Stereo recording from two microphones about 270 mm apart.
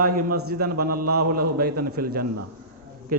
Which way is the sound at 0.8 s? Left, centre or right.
Right.